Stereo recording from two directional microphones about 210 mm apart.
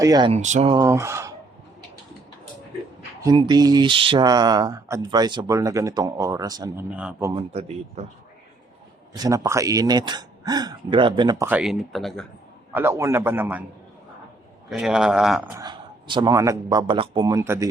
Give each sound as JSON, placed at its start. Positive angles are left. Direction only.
{"t": 0.0, "sound": "speech", "side_deg": -20}
{"t": 0.3, "sound": "speech", "side_deg": -35}
{"t": 0.7, "sound": "a man's voice", "side_deg": -15}
{"t": 3.2, "sound": "speech", "side_deg": -20}
{"t": 6.9, "sound": "a man's voice", "side_deg": -5}
{"t": 7.3, "sound": "speech", "side_deg": -30}
{"t": 9.1, "sound": "speech", "side_deg": -15}
{"t": 11.4, "sound": "speech", "side_deg": -5}
{"t": 12.7, "sound": "a man's voice", "side_deg": -10}
{"t": 14.7, "sound": "speech", "side_deg": 0}
{"t": 15.5, "sound": "a man's voice", "side_deg": -20}